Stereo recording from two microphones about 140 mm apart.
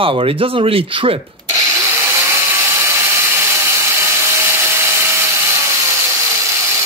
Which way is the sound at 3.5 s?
20° right (ahead or behind).